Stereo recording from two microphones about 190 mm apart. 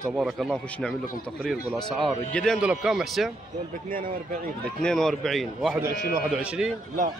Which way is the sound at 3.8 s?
50° right (ahead or behind).